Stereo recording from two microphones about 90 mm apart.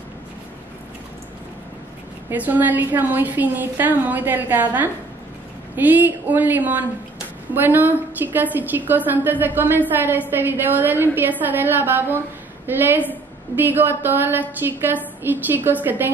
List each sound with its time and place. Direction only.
2.3 s a woman's voice: 20° right (ahead or behind)